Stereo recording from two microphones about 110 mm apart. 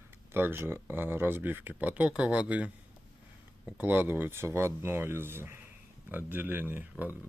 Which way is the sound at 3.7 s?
15° right (ahead or behind).